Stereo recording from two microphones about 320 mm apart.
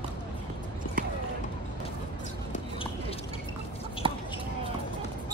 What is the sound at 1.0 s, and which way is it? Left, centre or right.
Basketball bounce, right.